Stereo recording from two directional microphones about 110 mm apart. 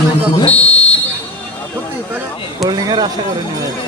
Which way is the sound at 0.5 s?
10° left (ahead or behind).